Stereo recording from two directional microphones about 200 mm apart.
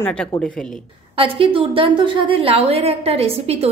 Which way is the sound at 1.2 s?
25° right (ahead or behind).